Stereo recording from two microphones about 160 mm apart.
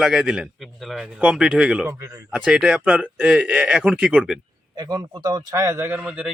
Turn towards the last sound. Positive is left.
turn(degrees=-5)  # may be behind; listen again after turning